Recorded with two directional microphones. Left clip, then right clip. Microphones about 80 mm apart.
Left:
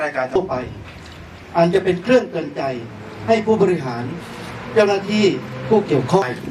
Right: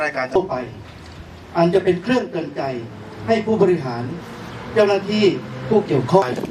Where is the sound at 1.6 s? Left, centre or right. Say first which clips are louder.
Even; left.